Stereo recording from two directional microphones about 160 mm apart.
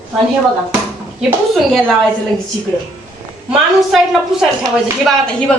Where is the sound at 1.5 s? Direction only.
Centre (ahead or behind).